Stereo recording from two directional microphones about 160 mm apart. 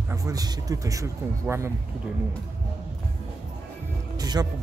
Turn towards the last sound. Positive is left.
turn(degrees=-25)  # may be behind; listen again after turning